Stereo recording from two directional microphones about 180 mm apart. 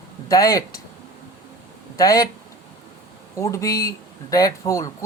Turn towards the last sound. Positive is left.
turn(degrees=15)  # may be behind; listen again after turning